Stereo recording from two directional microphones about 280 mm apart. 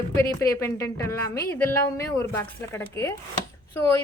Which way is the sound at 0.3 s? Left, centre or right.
Centre.